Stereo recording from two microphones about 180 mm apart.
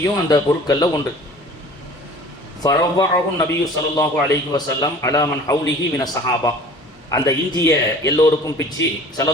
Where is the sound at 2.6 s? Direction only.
20° left (ahead or behind).